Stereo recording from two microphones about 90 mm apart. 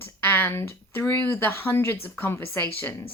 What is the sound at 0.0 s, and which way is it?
A woman's voice, 25° left (ahead or behind).